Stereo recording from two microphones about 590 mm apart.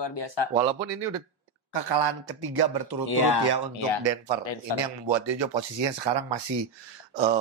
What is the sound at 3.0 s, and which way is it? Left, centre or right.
Speech, left.